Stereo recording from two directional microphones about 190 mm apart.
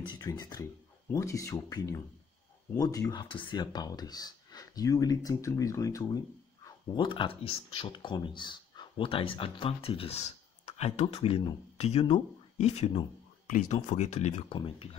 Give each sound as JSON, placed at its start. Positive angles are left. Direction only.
{"t": 0.0, "sound": "speech", "side_deg": 20}